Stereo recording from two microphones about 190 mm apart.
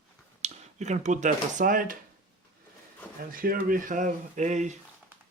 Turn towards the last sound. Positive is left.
turn(degrees=-40)  # may be behind; listen again after turning